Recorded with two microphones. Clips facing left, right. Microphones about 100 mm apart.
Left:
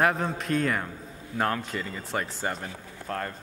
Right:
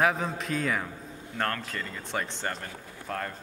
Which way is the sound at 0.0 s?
Centre (ahead or behind).